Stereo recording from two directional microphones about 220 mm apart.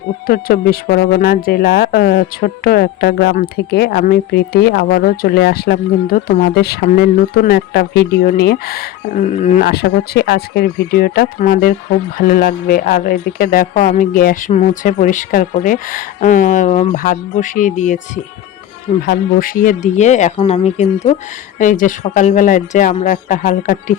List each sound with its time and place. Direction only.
0.3 s speech: 40° left (ahead or behind)
19.0 s speech: 40° left (ahead or behind)